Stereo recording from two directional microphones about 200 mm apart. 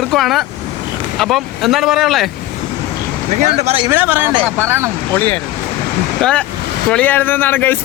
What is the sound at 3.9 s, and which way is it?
Speech, 10° right (ahead or behind).